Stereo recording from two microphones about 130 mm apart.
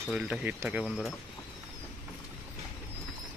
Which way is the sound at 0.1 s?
10° right (ahead or behind).